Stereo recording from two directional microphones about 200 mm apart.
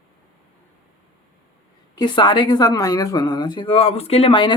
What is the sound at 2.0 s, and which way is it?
A woman's voice, 20° left (ahead or behind).